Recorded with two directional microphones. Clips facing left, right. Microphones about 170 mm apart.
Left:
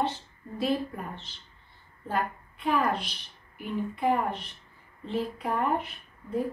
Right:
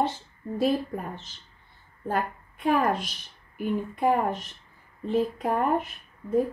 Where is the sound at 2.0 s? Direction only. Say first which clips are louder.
Right 2 dB; 45° right (ahead or behind).